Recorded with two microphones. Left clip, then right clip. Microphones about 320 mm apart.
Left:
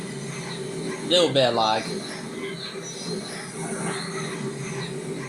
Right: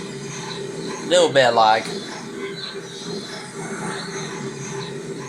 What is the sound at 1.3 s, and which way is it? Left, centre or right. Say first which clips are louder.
Speech: right 6 dB; right.